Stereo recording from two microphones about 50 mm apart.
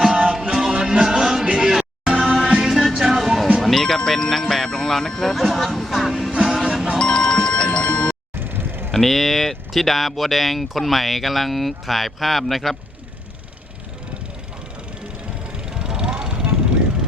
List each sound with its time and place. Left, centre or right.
0.0 s music: centre
7.0 s music: centre
8.4 s vehicle: right
8.9 s speech: centre
15.5 s vehicle: centre